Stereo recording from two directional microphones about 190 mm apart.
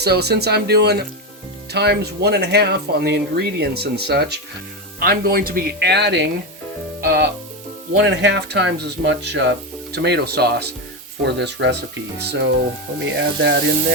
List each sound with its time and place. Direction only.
0.0 s speech: 60° right (ahead or behind)
8.0 s speech: 65° right (ahead or behind)